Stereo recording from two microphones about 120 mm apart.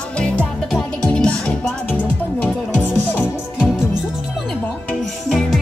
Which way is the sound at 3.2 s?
5° right (ahead or behind).